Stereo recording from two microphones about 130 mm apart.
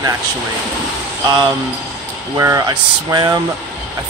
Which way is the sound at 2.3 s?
25° right (ahead or behind).